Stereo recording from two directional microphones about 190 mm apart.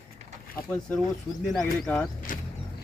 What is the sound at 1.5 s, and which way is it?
Speech, centre (ahead or behind).